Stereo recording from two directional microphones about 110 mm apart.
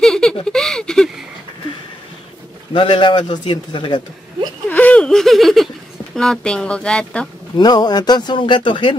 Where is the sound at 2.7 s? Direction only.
50° left (ahead or behind).